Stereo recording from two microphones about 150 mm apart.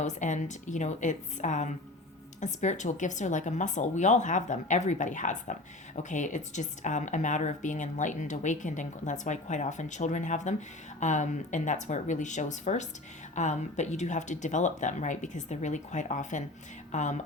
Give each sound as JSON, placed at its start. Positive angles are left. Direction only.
{"t": 0.0, "sound": "a woman's voice", "side_deg": 55}